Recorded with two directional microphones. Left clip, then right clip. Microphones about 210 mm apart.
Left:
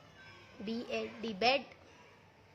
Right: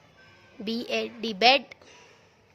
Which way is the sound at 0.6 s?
45° right (ahead or behind).